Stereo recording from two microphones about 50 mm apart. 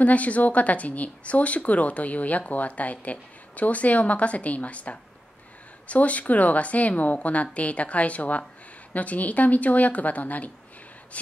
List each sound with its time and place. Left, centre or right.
0.0 s a woman's voice: left